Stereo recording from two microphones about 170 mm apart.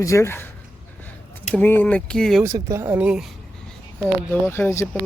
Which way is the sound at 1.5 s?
10° left (ahead or behind).